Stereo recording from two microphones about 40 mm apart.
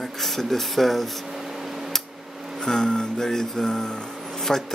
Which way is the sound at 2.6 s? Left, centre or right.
Centre.